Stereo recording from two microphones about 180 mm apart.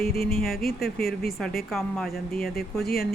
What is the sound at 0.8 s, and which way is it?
Speech, 55° left (ahead or behind).